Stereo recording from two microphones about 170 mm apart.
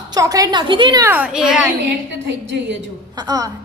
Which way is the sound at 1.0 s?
5° right (ahead or behind).